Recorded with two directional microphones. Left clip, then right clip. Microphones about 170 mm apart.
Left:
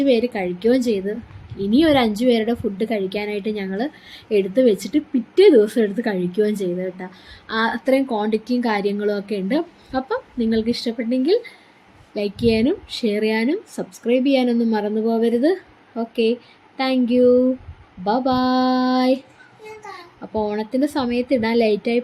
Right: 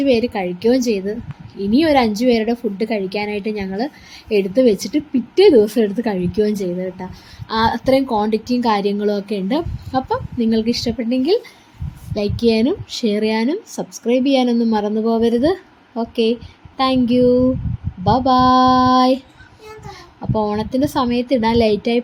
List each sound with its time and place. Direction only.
0.0 s a woman's voice: 15° right (ahead or behind)
20.3 s a woman's voice: 20° right (ahead or behind)